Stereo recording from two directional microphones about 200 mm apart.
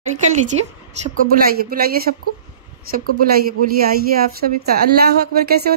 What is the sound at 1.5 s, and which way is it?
Speech, 50° right (ahead or behind).